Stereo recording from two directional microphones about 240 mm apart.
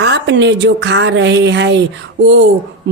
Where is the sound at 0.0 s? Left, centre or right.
Right.